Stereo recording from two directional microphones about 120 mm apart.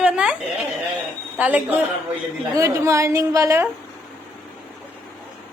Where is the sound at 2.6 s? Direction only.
25° right (ahead or behind).